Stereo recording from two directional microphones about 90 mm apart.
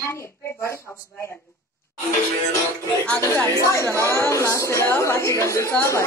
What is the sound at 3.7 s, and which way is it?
Speech, 35° left (ahead or behind).